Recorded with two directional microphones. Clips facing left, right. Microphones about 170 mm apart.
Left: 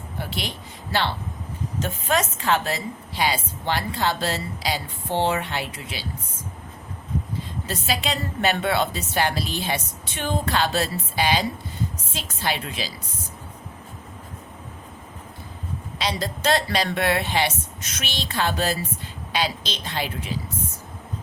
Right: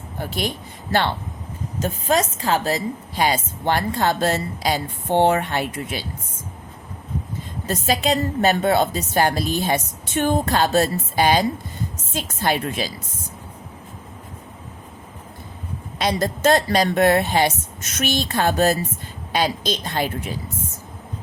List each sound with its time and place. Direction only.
0.2 s speech: 45° right (ahead or behind)
1.8 s a woman's voice: 35° right (ahead or behind)
7.7 s a woman's voice: 45° right (ahead or behind)
16.0 s a woman's voice: 50° right (ahead or behind)